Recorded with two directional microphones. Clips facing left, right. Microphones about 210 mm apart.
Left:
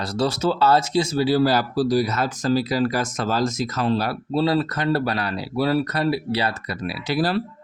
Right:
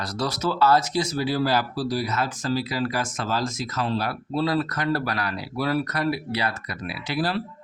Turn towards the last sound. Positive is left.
turn(degrees=40)  # may be behind; listen again after turning